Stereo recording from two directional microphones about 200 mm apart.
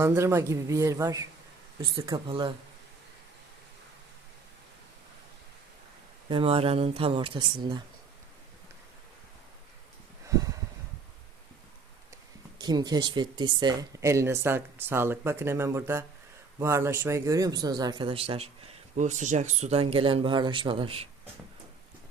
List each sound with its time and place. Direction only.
0.0 s a man's voice: 10° right (ahead or behind)
6.2 s a man's voice: 25° right (ahead or behind)
10.2 s a sound: 15° right (ahead or behind)
12.5 s a man's voice: 20° right (ahead or behind)